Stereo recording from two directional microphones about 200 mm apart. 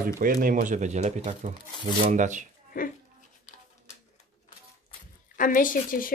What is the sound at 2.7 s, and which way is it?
Speech, 45° left (ahead or behind).